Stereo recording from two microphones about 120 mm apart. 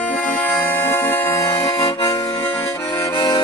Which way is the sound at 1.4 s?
50° left (ahead or behind).